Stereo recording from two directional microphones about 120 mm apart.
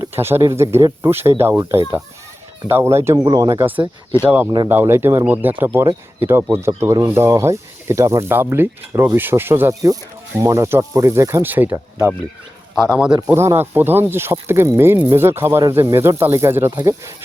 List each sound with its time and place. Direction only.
0.0 s speech: 20° right (ahead or behind)
4.7 s speech: 20° right (ahead or behind)
5.7 s speech: 25° right (ahead or behind)
12.7 s speech: 5° right (ahead or behind)
13.3 s speech: 20° right (ahead or behind)